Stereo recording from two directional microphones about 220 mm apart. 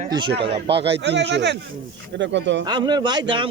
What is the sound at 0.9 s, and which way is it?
Speech, 50° right (ahead or behind).